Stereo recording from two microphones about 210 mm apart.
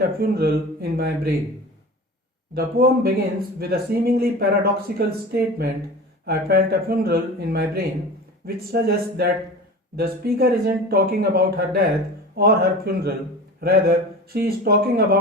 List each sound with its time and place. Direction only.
0.0 s speech: 45° right (ahead or behind)
2.6 s speech: 45° right (ahead or behind)